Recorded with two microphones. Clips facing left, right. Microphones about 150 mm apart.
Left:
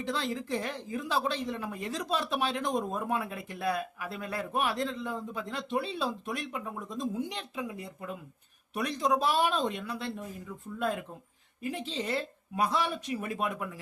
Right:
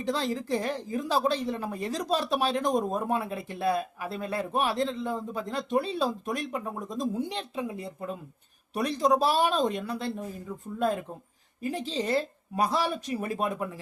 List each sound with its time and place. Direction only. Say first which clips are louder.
0.0 s a woman's voice: right 4 dB; 35° right (ahead or behind)